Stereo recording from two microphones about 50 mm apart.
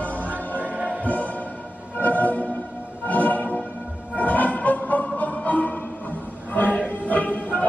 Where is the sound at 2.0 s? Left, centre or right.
Left.